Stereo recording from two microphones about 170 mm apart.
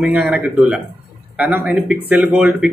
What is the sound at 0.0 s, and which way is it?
Speech, 5° right (ahead or behind).